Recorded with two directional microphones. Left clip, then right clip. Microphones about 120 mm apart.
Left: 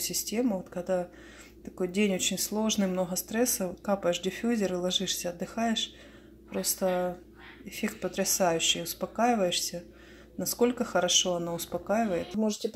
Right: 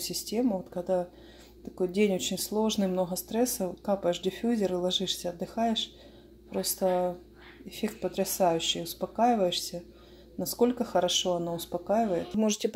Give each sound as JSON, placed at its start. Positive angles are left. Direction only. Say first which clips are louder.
{"t": 0.0, "sound": "speech", "louder": "even", "side_deg": -10}
{"t": 6.9, "sound": "speech", "louder": "right 2 dB", "side_deg": 15}
{"t": 7.7, "sound": "speech", "louder": "right 1 dB", "side_deg": -10}
{"t": 12.6, "sound": "speech", "louder": "right 3 dB", "side_deg": -55}